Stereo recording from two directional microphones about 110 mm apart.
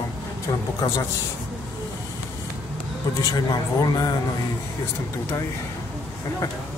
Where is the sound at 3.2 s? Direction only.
35° left (ahead or behind).